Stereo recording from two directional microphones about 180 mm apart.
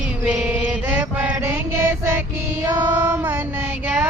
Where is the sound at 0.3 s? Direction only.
5° right (ahead or behind).